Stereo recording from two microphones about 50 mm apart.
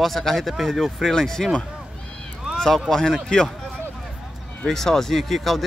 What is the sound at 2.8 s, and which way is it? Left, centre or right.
Speech, centre.